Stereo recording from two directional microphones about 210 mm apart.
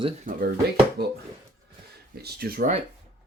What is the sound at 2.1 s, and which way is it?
Speech, 50° right (ahead or behind).